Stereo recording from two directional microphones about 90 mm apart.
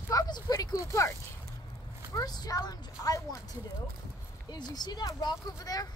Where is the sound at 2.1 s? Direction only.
45° left (ahead or behind).